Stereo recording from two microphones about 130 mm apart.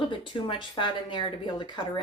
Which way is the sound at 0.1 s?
40° left (ahead or behind).